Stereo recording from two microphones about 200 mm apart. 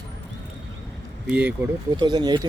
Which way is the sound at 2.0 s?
20° right (ahead or behind).